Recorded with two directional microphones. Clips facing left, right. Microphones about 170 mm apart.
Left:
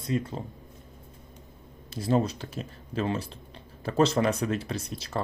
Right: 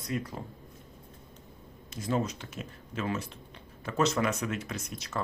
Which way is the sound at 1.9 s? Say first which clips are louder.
Left 5 dB; 35° left (ahead or behind).